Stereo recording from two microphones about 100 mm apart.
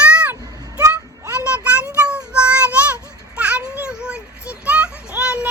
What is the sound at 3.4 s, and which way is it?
Children playing, 15° right (ahead or behind).